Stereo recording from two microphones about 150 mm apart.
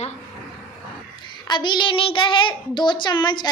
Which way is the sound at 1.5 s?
30° left (ahead or behind).